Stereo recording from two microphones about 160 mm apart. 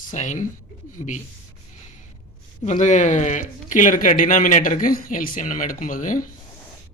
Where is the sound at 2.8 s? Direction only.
50° left (ahead or behind).